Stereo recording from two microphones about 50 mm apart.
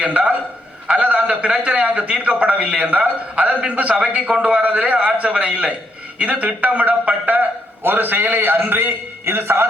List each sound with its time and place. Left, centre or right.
0.0 s a man's voice: right